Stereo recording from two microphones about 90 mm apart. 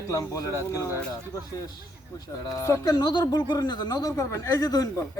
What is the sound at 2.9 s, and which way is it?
Speech, 50° left (ahead or behind).